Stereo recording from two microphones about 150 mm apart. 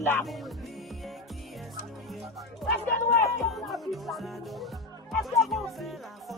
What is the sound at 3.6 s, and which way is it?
Music, centre (ahead or behind).